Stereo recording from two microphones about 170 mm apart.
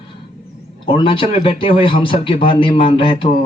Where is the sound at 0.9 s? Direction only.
30° left (ahead or behind).